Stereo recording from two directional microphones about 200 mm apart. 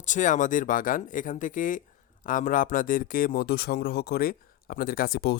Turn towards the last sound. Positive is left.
turn(degrees=50)  # may be behind; listen again after turning